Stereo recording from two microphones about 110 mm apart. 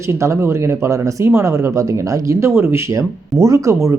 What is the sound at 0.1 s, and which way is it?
Speech, 25° right (ahead or behind).